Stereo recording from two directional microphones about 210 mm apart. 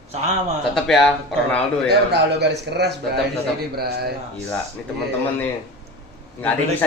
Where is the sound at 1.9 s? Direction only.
50° right (ahead or behind).